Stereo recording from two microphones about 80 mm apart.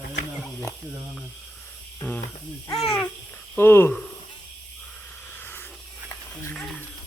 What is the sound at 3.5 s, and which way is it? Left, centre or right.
Speech, left.